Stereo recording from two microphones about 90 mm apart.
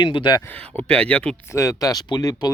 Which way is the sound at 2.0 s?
50° left (ahead or behind).